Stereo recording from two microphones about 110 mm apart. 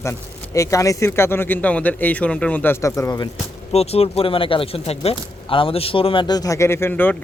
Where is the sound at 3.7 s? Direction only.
70° left (ahead or behind); by 6.3 s 50° left (ahead or behind).